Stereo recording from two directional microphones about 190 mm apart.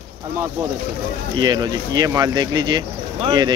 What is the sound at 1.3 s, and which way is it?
Speech, 20° right (ahead or behind).